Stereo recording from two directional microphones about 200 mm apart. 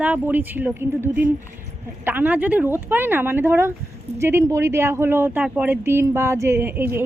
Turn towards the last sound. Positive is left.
turn(degrees=-10)  # may be behind; listen again after turning